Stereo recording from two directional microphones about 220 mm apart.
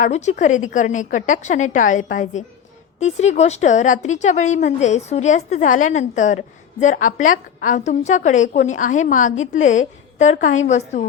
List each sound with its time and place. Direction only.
0.0 s a woman's voice: 30° left (ahead or behind)